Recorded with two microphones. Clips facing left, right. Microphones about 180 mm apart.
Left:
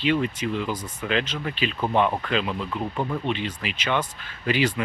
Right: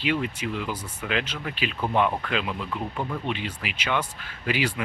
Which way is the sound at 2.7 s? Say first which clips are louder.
Left 3 dB; 10° left (ahead or behind).